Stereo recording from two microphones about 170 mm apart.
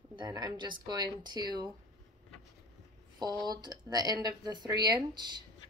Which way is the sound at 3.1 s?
25° right (ahead or behind).